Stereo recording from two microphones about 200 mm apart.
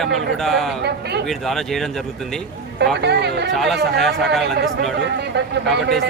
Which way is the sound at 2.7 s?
55° right (ahead or behind).